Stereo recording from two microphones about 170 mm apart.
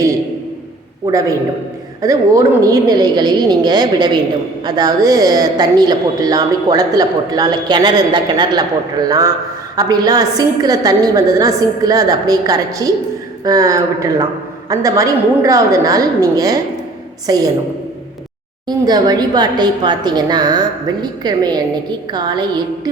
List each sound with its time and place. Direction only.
1.0 s a woman's voice: 20° right (ahead or behind)
18.7 s a woman's voice: 25° right (ahead or behind)